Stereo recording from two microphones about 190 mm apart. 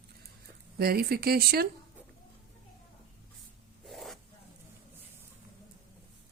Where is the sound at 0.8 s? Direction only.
55° right (ahead or behind).